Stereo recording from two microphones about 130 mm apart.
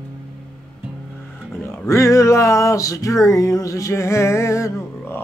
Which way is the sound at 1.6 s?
20° left (ahead or behind).